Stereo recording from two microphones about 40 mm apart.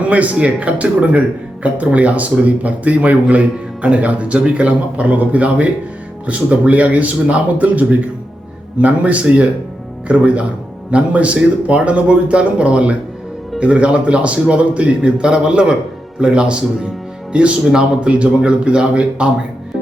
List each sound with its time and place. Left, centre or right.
0.1 s a man's voice: right